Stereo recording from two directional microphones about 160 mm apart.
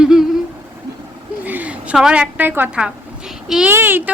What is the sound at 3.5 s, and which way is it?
Humming, 5° right (ahead or behind).